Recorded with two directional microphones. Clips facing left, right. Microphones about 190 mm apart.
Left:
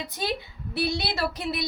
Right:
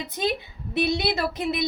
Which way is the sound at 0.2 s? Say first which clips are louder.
Right 4 dB; 20° right (ahead or behind).